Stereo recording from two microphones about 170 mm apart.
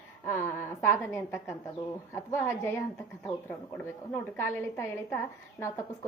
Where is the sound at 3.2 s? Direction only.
5° left (ahead or behind).